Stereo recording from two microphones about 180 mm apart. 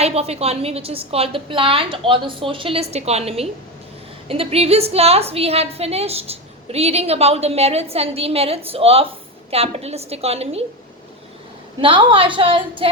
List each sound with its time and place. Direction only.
0.0 s a woman's voice: 35° right (ahead or behind)
11.8 s a woman's voice: 30° right (ahead or behind)